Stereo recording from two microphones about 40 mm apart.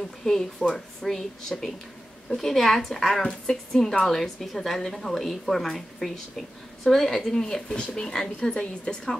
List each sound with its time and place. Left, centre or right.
0.2 s a woman's voice: centre
7.6 s speech: left